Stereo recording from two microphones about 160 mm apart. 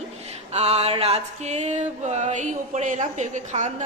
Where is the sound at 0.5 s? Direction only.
40° right (ahead or behind).